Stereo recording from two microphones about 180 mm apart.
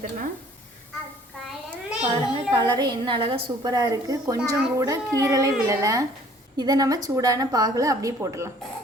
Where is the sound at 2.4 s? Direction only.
25° right (ahead or behind).